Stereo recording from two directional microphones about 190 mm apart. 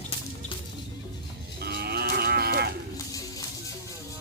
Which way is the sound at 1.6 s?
55° right (ahead or behind).